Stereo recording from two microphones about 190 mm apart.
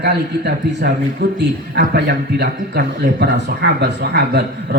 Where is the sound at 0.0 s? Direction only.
60° right (ahead or behind).